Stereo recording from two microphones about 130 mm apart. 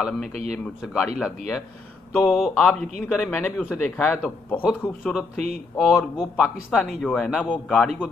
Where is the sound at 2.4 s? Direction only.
10° left (ahead or behind).